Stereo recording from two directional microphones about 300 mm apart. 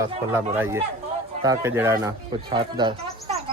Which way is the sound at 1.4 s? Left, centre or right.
Centre.